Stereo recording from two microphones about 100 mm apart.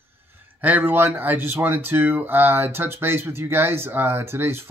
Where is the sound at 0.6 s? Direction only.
20° right (ahead or behind).